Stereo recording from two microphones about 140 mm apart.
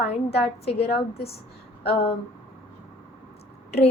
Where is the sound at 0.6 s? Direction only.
45° left (ahead or behind).